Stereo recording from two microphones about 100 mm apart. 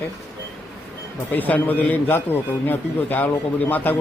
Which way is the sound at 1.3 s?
20° left (ahead or behind).